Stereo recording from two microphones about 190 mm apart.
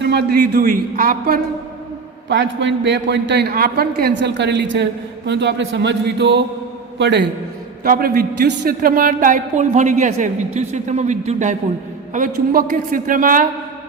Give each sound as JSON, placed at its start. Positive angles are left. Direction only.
{"t": 0.0, "sound": "a woman's voice", "side_deg": -60}
{"t": 2.3, "sound": "a man's voice", "side_deg": -70}
{"t": 7.9, "sound": "a woman's voice", "side_deg": -50}